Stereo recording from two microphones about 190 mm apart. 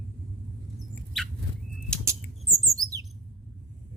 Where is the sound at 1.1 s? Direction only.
Centre (ahead or behind).